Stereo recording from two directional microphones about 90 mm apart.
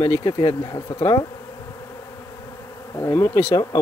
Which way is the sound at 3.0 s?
30° left (ahead or behind).